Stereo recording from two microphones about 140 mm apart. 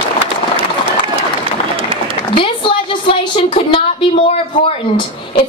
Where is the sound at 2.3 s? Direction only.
40° left (ahead or behind).